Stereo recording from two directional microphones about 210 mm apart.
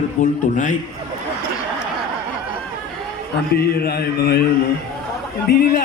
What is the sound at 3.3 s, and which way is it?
A man's voice, 50° left (ahead or behind).